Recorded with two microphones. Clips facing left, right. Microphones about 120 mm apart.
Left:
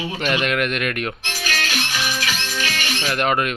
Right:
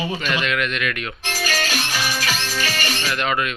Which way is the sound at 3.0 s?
50° left (ahead or behind).